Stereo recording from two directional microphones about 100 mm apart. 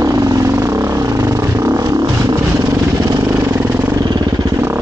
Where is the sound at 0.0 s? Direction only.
35° right (ahead or behind).